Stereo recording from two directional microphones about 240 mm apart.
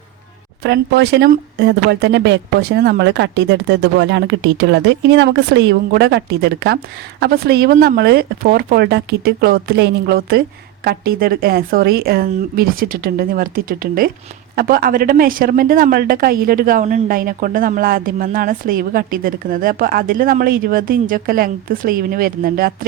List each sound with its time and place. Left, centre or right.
0.6 s a woman's voice: right